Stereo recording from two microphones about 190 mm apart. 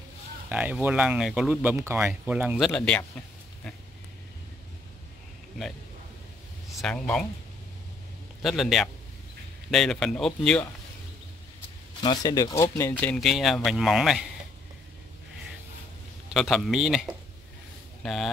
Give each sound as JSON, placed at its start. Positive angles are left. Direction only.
{"t": 0.5, "sound": "speech", "side_deg": -5}
{"t": 2.7, "sound": "speech", "side_deg": 5}
{"t": 6.8, "sound": "speech", "side_deg": 5}
{"t": 8.4, "sound": "speech", "side_deg": 0}
{"t": 12.0, "sound": "speech", "side_deg": 20}
{"t": 13.0, "sound": "speech", "side_deg": 5}
{"t": 16.3, "sound": "speech", "side_deg": 0}